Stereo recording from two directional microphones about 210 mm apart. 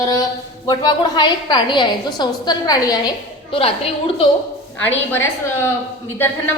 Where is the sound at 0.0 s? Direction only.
15° left (ahead or behind).